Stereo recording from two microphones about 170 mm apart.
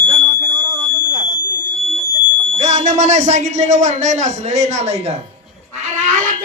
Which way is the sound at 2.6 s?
40° right (ahead or behind).